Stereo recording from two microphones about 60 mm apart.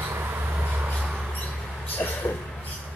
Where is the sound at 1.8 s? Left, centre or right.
Left.